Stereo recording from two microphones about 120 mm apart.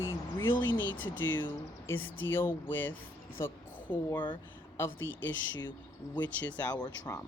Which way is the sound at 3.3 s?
20° left (ahead or behind).